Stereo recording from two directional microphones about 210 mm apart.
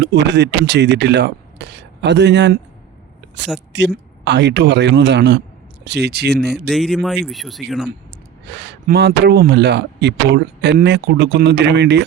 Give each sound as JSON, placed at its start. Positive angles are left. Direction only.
{"t": 0.0, "sound": "speech", "side_deg": -55}
{"t": 3.7, "sound": "speech", "side_deg": -55}
{"t": 6.5, "sound": "speech", "side_deg": 0}
{"t": 8.4, "sound": "speech", "side_deg": -55}